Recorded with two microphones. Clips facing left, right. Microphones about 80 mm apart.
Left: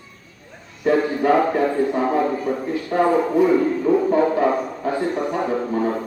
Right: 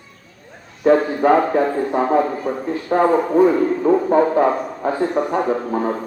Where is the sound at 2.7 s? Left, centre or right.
Right.